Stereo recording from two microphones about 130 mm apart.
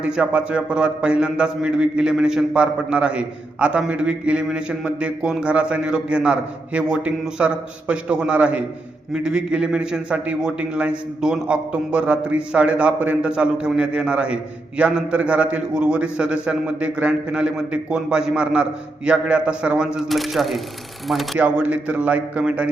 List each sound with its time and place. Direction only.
0.0 s a man's voice: 5° right (ahead or behind)